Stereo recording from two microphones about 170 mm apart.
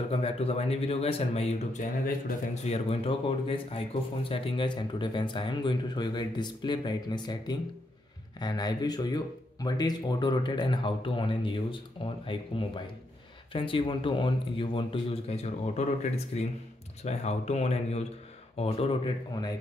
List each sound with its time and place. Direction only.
0.1 s a man's voice: 35° left (ahead or behind); by 2.3 s 50° left (ahead or behind)
2.6 s a man's voice: 35° left (ahead or behind)